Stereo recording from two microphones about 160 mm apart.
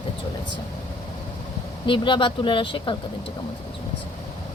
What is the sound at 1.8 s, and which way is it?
A woman's voice, 30° left (ahead or behind).